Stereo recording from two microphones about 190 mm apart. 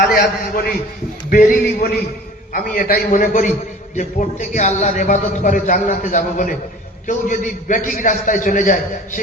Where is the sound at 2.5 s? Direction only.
50° left (ahead or behind).